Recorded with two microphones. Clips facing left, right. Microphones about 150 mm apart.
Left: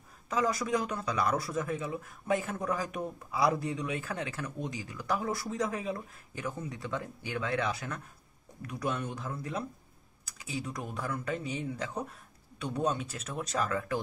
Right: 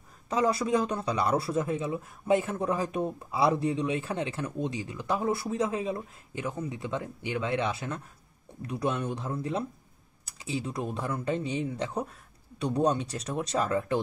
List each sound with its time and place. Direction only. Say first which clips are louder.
0.3 s speech: right 4 dB; 30° right (ahead or behind)